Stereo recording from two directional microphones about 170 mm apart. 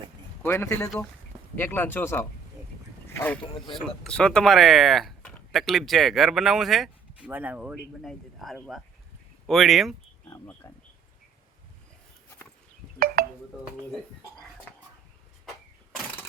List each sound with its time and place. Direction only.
0.4 s speech: 15° left (ahead or behind)
3.1 s a sound: 15° left (ahead or behind)
3.8 s speech: centre (ahead or behind)
10.2 s speech: 10° left (ahead or behind)
13.2 s music: 60° right (ahead or behind)